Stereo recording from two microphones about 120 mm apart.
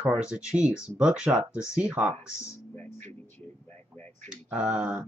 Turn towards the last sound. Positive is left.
turn(degrees=-15)  # may be behind; listen again after turning